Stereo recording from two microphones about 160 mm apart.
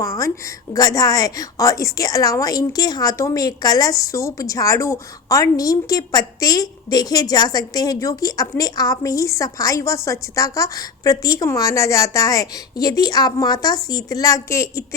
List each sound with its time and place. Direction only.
0.0 s a woman's voice: 20° left (ahead or behind)